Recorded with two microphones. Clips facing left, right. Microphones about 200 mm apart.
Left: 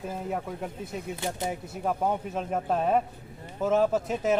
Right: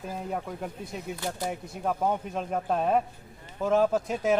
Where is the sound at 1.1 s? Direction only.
25° left (ahead or behind).